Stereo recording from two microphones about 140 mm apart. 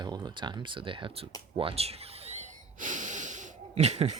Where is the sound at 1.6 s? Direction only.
45° right (ahead or behind); by 3.5 s 60° right (ahead or behind).